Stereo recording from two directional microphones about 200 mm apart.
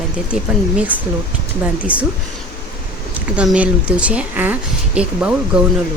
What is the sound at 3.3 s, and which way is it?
A woman's voice, 5° right (ahead or behind).